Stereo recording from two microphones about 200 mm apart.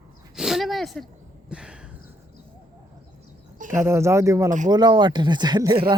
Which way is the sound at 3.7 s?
15° right (ahead or behind).